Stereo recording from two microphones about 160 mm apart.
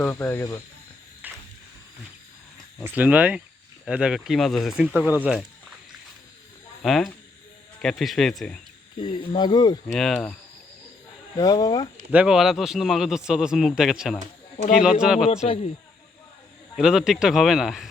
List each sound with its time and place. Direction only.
0.0 s speech: 15° left (ahead or behind)
1.2 s a sound: 10° right (ahead or behind)
2.8 s a man's voice: 10° right (ahead or behind)
6.8 s a man's voice: centre (ahead or behind)
9.0 s speech: 30° left (ahead or behind)
9.8 s a man's voice: 5° left (ahead or behind)
11.3 s speech: 25° left (ahead or behind)
12.1 s a man's voice: 5° right (ahead or behind)
16.7 s a man's voice: 5° right (ahead or behind)